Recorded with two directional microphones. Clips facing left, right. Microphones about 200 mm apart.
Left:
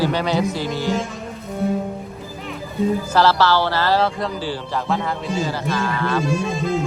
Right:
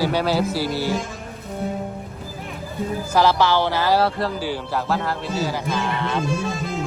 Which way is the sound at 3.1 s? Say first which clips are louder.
Right 1 dB; 15° right (ahead or behind).